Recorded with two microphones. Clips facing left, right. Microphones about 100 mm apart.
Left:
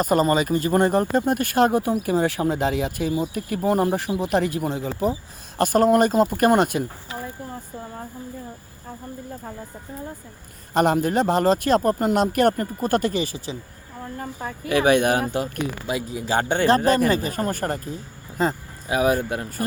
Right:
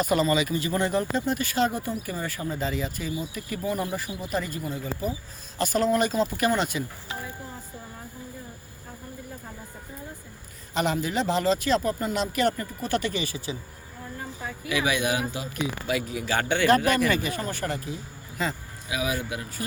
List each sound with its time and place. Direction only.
0.0 s speech: 45° left (ahead or behind); by 5.1 s 70° left (ahead or behind)
5.5 s speech: 50° left (ahead or behind)
10.8 s speech: 50° left (ahead or behind); by 13.6 s 35° left (ahead or behind)
14.2 s speech: 50° left (ahead or behind)
15.9 s speech: 25° left (ahead or behind); by 19.6 s 45° left (ahead or behind)